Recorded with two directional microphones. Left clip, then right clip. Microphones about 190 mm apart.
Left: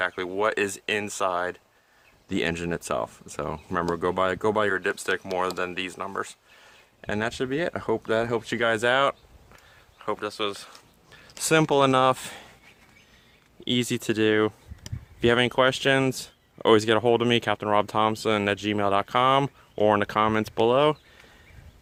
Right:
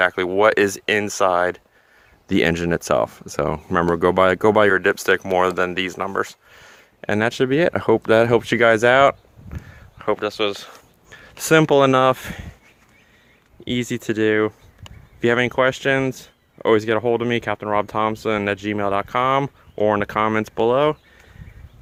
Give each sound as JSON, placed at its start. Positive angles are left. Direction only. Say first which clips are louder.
{"t": 0.0, "sound": "speech", "louder": "right 9 dB", "side_deg": -40}
{"t": 13.7, "sound": "speech", "louder": "right 2 dB", "side_deg": -5}